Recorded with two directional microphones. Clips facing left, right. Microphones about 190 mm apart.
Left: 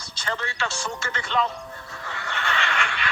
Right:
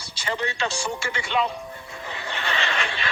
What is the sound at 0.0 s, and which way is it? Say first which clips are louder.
Music: right 3 dB; 10° right (ahead or behind).